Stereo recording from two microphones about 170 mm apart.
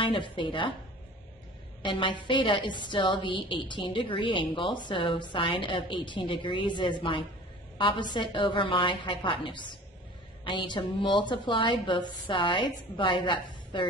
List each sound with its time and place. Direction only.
0.0 s a woman's voice: 30° left (ahead or behind)
1.8 s a woman's voice: 30° left (ahead or behind)